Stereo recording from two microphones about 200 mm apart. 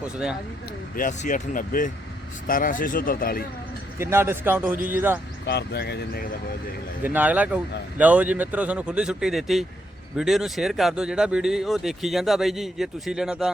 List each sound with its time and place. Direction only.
0.9 s speech: 40° left (ahead or behind)
3.9 s speech: 10° right (ahead or behind)
5.5 s speech: 55° left (ahead or behind)
7.0 s speech: 10° right (ahead or behind)